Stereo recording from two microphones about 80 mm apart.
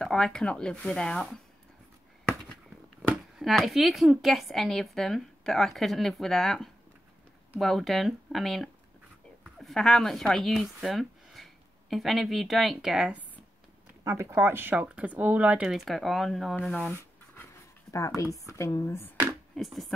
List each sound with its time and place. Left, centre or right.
0.0 s speech: centre
3.1 s a woman's voice: centre
14.0 s speech: right; by 15.7 s centre
15.7 s speech: centre
17.9 s speech: left
19.5 s speech: centre